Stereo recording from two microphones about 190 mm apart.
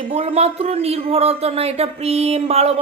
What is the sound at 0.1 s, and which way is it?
Speech, 30° right (ahead or behind).